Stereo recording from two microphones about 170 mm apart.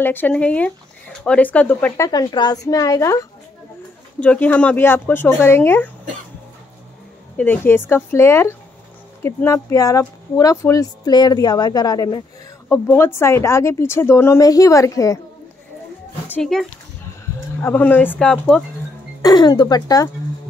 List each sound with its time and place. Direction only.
0.0 s speech: 10° left (ahead or behind)
2.0 s speech: 25° left (ahead or behind)
4.2 s speech: 10° left (ahead or behind)
7.3 s speech: 10° left (ahead or behind)
16.3 s speech: 5° left (ahead or behind)
19.2 s speech: 25° left (ahead or behind)